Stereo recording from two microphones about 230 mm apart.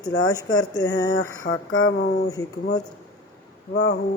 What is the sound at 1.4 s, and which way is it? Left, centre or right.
Speech, left.